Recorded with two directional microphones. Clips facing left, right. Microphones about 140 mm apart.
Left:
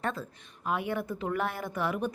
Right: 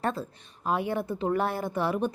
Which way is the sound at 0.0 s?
30° right (ahead or behind).